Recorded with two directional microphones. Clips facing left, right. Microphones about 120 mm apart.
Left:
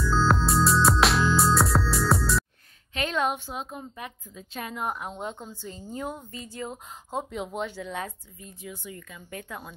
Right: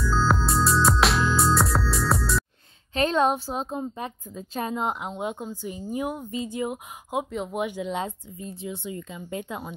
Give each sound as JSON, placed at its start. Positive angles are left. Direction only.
{"t": 0.0, "sound": "music", "side_deg": 0}
{"t": 2.9, "sound": "a woman's voice", "side_deg": -35}
{"t": 4.7, "sound": "speech", "side_deg": -20}
{"t": 7.2, "sound": "speech", "side_deg": 0}
{"t": 7.5, "sound": "speech", "side_deg": -15}